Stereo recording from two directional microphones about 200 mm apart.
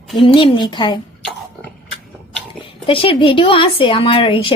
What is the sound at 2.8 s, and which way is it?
A woman's voice, 25° left (ahead or behind).